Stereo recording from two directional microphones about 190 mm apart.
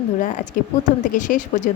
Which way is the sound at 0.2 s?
40° left (ahead or behind).